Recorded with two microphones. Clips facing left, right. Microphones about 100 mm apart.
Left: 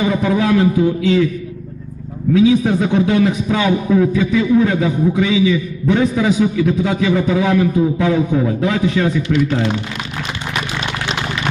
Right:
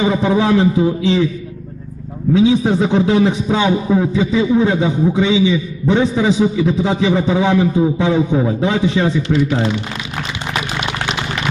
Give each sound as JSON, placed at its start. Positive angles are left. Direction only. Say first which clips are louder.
{"t": 0.0, "sound": "a man's voice", "louder": "right 1 dB", "side_deg": -25}
{"t": 2.3, "sound": "a man's voice", "louder": "even", "side_deg": -30}